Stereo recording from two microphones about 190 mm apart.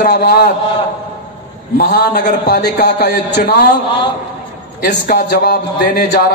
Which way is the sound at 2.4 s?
60° left (ahead or behind).